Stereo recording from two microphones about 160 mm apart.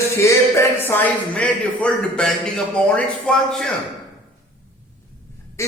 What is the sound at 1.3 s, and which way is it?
A man's voice, 5° left (ahead or behind).